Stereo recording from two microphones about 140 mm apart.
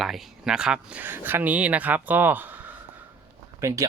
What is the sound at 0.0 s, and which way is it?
Speech, 5° right (ahead or behind).